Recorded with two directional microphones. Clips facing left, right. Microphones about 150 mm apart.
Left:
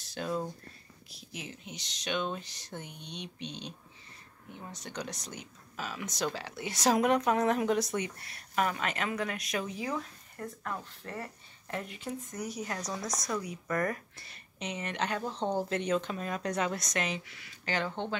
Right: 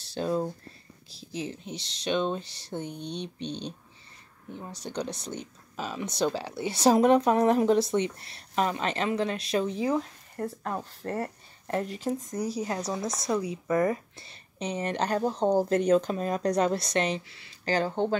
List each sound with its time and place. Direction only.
0.0 s speech: 30° right (ahead or behind)